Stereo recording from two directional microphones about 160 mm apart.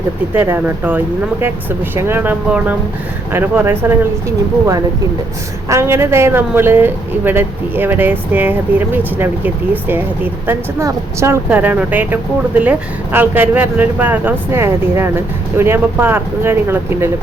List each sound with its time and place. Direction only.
0.3 s speech: 15° right (ahead or behind)
5.6 s speech: 15° right (ahead or behind)